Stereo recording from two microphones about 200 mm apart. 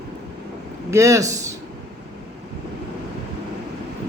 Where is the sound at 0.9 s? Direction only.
15° right (ahead or behind).